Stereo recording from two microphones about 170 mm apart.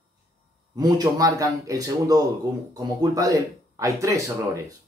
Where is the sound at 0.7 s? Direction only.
20° right (ahead or behind).